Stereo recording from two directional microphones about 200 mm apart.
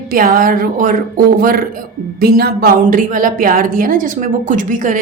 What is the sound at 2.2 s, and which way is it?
A woman's voice, 50° right (ahead or behind).